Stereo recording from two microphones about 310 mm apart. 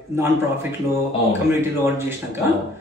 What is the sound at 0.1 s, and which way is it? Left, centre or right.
Speech, centre.